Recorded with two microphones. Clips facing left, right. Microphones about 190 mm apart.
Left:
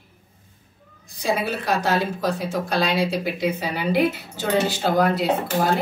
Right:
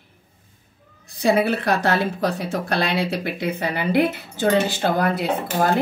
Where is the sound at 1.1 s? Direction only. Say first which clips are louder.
Right 5 dB; 60° right (ahead or behind).